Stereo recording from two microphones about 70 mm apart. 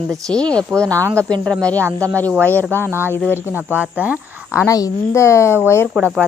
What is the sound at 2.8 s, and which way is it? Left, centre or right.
Speech, right.